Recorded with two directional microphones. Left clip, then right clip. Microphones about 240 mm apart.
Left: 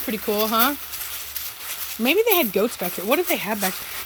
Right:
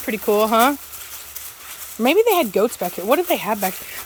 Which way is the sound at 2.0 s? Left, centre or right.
Centre.